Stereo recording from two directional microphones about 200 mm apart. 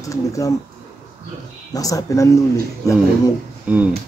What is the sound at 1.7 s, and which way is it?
Speech, 15° left (ahead or behind).